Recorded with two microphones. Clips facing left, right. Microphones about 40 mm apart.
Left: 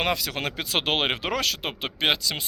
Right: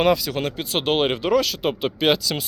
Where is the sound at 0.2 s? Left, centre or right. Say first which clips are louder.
Right 4 dB; left.